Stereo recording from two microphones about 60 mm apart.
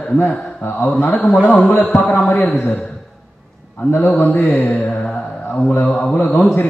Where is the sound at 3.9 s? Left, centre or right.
Left.